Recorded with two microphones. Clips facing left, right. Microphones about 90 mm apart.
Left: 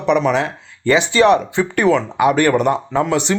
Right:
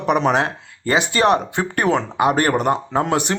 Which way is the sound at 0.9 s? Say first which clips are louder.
Left 4 dB; 45° right (ahead or behind).